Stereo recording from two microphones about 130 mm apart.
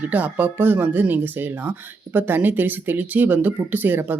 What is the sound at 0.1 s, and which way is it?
Speech, 15° right (ahead or behind).